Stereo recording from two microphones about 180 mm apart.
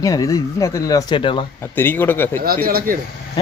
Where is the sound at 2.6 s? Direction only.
55° right (ahead or behind).